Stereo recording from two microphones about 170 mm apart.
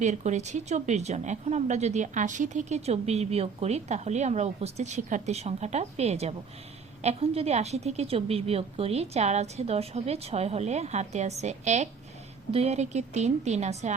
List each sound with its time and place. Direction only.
0.0 s speech: 45° right (ahead or behind)